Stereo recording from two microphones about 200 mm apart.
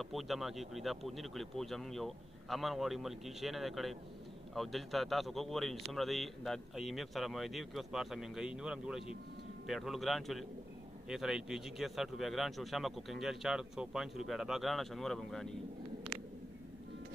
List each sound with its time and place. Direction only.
0.0 s a man's voice: centre (ahead or behind)